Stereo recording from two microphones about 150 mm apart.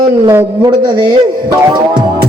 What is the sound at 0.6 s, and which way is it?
A man's voice, 30° right (ahead or behind).